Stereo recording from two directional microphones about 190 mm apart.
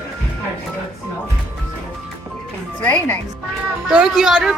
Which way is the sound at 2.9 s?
10° left (ahead or behind).